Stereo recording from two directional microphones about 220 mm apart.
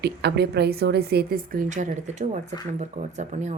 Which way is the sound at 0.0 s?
50° right (ahead or behind).